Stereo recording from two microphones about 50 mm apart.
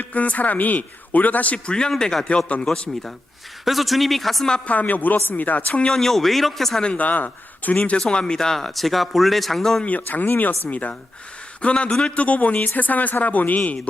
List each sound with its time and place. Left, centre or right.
0.0 s a man's voice: left
1.5 s speech: centre
4.6 s a man's voice: left
5.8 s speech: centre
6.8 s speech: left
7.9 s speech: centre
9.8 s a man's voice: left